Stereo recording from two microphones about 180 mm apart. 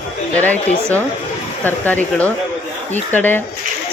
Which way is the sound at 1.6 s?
10° left (ahead or behind).